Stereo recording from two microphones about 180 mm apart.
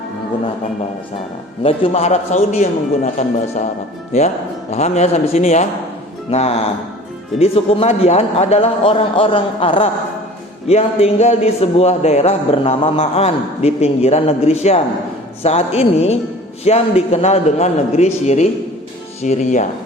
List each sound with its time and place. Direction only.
1.6 s speech: 35° left (ahead or behind)
4.7 s speech: 40° left (ahead or behind)